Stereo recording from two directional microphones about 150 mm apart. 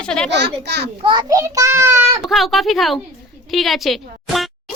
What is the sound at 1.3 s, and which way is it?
Speech, 20° right (ahead or behind).